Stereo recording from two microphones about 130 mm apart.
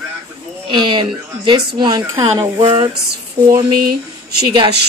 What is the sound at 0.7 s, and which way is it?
Speech, 35° right (ahead or behind).